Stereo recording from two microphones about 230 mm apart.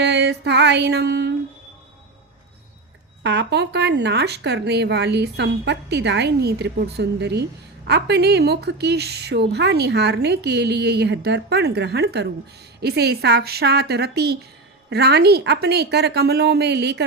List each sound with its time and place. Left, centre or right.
0.0 s music: right
3.2 s a woman's voice: right